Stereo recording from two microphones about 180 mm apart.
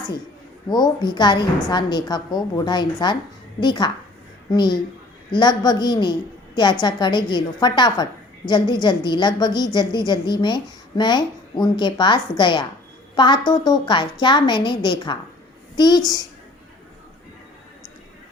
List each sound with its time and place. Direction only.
0.7 s a woman's voice: 25° left (ahead or behind)